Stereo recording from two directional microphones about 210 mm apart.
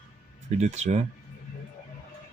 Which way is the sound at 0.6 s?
35° right (ahead or behind).